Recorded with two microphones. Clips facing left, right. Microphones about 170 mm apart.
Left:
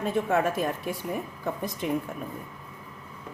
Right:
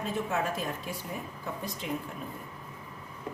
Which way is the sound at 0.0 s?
55° left (ahead or behind).